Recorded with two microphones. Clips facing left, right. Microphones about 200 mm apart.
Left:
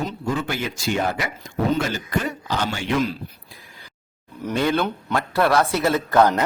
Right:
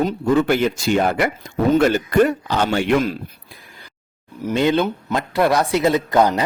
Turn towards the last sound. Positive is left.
turn(degrees=-15)  # may be behind; listen again after turning